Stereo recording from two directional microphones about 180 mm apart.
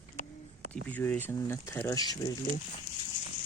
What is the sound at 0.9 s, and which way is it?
Speech, 10° left (ahead or behind).